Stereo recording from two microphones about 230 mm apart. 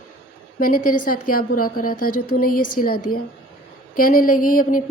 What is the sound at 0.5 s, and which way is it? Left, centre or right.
Speech, left.